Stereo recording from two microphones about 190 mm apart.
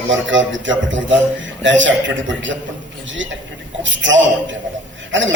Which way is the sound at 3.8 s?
75° right (ahead or behind).